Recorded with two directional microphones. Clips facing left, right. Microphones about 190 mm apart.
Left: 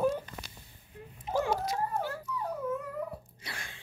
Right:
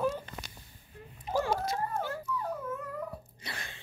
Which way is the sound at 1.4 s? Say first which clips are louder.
Left 1 dB; 10° left (ahead or behind).